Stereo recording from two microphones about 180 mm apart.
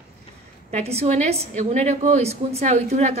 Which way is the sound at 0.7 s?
35° right (ahead or behind).